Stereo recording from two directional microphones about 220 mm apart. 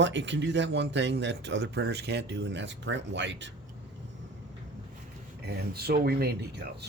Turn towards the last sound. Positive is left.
turn(degrees=-50)  # may be behind; listen again after turning